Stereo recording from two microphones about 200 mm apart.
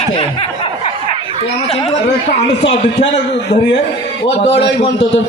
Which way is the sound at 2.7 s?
35° left (ahead or behind).